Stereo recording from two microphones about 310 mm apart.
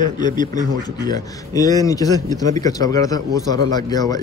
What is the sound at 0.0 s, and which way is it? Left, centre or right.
A man's voice, centre.